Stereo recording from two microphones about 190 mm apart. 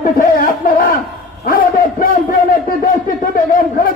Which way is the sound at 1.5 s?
50° left (ahead or behind).